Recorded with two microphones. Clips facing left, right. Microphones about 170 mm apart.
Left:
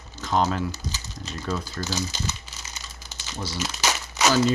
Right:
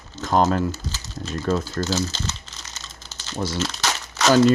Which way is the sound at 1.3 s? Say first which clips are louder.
Right 7 dB; 50° right (ahead or behind).